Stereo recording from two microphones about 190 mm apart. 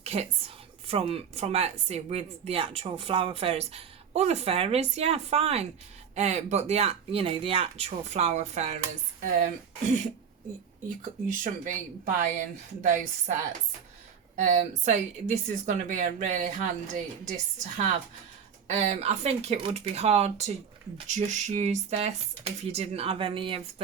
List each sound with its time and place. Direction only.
0.0 s a woman's voice: 35° right (ahead or behind)
11.4 s a woman's voice: 45° right (ahead or behind)
14.3 s a woman's voice: 40° right (ahead or behind)